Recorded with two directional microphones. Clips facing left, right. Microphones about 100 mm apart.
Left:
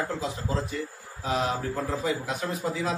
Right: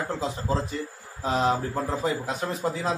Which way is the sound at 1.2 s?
30° right (ahead or behind).